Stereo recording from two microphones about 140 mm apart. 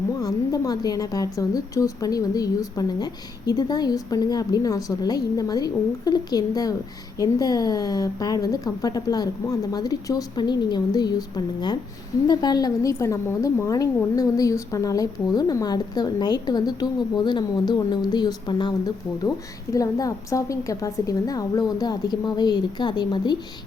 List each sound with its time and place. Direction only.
0.2 s a woman's voice: 25° left (ahead or behind)
19.7 s a woman's voice: 25° left (ahead or behind)